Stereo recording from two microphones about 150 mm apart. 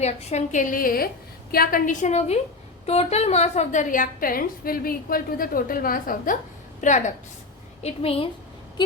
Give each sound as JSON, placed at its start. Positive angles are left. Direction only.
{"t": 0.0, "sound": "a woman's voice", "side_deg": 45}
{"t": 6.8, "sound": "a woman's voice", "side_deg": 55}
{"t": 7.8, "sound": "a woman's voice", "side_deg": 45}